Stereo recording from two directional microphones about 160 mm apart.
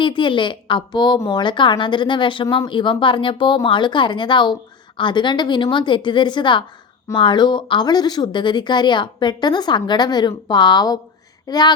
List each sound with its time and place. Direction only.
0.0 s speech: 30° left (ahead or behind)